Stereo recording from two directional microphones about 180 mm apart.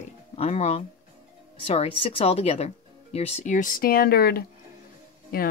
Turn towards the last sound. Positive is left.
turn(degrees=55)  # may be behind; listen again after turning